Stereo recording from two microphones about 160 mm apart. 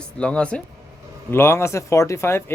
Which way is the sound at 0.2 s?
5° left (ahead or behind).